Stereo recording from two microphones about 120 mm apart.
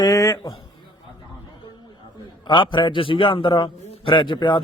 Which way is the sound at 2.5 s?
40° left (ahead or behind).